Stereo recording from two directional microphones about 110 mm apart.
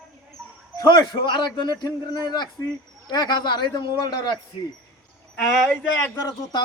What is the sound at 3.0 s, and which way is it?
Speech, 40° left (ahead or behind).